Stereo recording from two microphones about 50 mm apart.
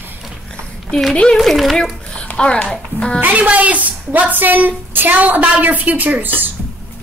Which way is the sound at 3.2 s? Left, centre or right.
Right.